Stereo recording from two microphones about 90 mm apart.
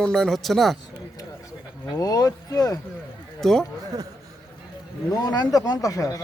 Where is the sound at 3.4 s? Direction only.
5° left (ahead or behind).